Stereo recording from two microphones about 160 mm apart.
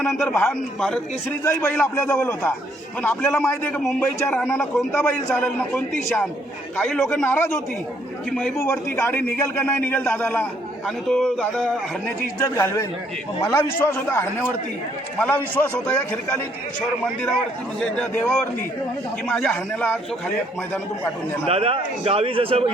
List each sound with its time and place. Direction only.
0.0 s a man's voice: 5° left (ahead or behind)
12.4 s a man's voice: 15° left (ahead or behind)
17.7 s a man's voice: 5° left (ahead or behind)
21.4 s a man's voice: 40° right (ahead or behind)